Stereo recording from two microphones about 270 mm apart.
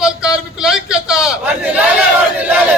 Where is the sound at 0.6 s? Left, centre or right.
Centre.